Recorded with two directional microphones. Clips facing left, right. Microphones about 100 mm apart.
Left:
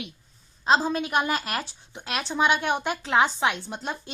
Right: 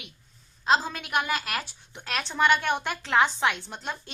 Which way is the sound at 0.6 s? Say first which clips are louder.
Left 3 dB; 20° left (ahead or behind).